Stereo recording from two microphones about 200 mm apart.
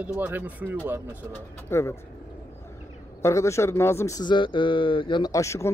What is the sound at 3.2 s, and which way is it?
Speech, 15° left (ahead or behind).